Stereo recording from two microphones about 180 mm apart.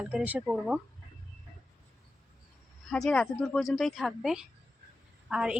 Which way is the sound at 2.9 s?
Centre (ahead or behind).